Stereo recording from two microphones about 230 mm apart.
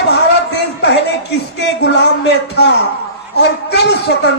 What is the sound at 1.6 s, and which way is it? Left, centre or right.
A man's voice, left.